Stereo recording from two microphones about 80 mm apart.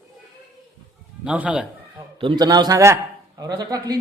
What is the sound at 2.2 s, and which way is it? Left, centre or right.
A man's voice, right.